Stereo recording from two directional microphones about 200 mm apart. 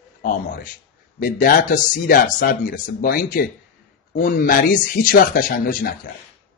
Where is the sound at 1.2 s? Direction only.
45° left (ahead or behind).